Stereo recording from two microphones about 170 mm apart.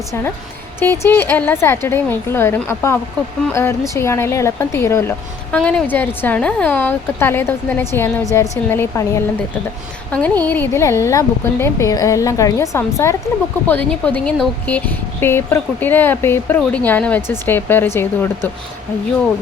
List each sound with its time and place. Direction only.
0.8 s speech: 15° left (ahead or behind)